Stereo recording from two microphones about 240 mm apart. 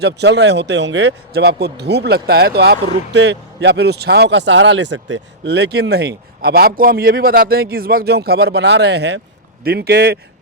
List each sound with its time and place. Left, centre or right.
0.0 s a man's voice: right